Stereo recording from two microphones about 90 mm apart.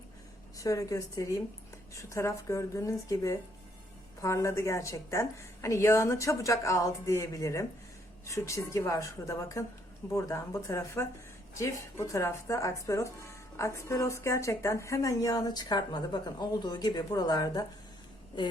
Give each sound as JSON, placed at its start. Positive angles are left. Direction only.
{"t": 0.6, "sound": "speech", "side_deg": 40}